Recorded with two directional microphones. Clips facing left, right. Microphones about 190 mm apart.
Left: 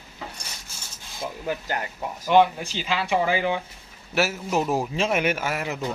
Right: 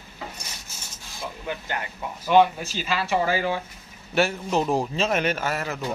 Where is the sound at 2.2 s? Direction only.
15° left (ahead or behind).